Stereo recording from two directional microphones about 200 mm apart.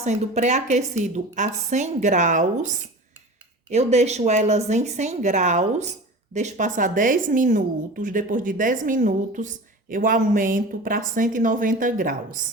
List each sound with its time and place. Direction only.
0.0 s a woman's voice: 35° right (ahead or behind)